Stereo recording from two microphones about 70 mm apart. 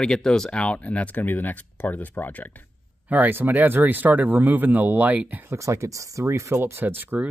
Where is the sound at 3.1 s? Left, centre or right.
Right.